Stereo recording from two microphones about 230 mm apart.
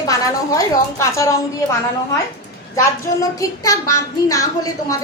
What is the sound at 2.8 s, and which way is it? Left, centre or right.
Speech, centre.